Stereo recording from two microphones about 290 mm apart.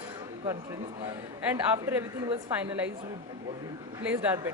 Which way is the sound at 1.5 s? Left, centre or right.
Centre.